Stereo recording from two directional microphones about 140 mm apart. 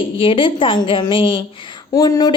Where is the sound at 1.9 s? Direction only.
25° left (ahead or behind).